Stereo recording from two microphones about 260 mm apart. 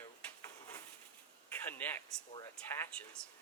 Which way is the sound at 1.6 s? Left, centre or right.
Centre.